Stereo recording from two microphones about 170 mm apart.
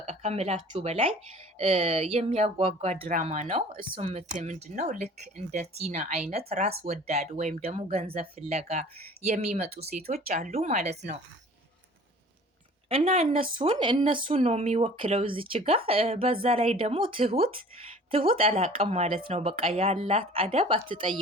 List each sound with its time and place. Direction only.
0.0 s speech: 40° right (ahead or behind)
9.6 s speech: 65° right (ahead or behind)
10.2 s speech: 50° right (ahead or behind)
12.9 s speech: 35° right (ahead or behind)